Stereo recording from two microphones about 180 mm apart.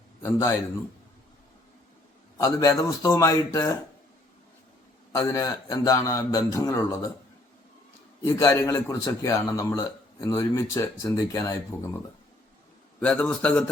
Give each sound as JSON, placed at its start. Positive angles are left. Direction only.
{"t": 0.2, "sound": "a man's voice", "side_deg": 10}
{"t": 2.4, "sound": "a man's voice", "side_deg": 20}
{"t": 5.1, "sound": "a man's voice", "side_deg": 15}
{"t": 8.2, "sound": "a man's voice", "side_deg": 15}
{"t": 13.0, "sound": "a man's voice", "side_deg": 5}